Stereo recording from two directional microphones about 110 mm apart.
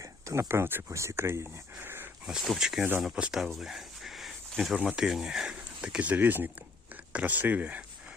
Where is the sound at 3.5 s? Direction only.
Centre (ahead or behind).